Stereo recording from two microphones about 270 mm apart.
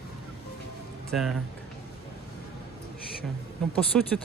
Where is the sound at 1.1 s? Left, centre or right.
Centre.